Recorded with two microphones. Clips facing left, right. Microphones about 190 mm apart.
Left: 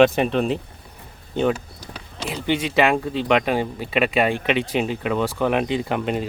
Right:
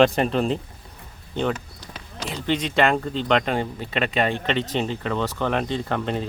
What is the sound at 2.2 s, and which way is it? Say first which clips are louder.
Speech: left 2 dB; 10° left (ahead or behind).